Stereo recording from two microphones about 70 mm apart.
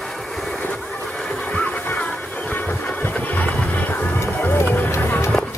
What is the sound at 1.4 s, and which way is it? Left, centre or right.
Music, left.